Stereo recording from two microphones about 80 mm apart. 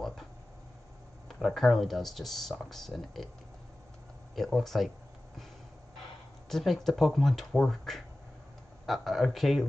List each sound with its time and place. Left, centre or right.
1.4 s speech: centre
4.4 s speech: centre
6.5 s speech: centre